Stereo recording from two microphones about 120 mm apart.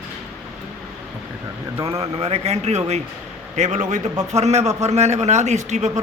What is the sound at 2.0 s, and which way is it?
A man's voice, 60° right (ahead or behind).